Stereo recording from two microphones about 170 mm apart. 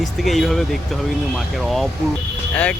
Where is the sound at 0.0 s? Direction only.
Centre (ahead or behind).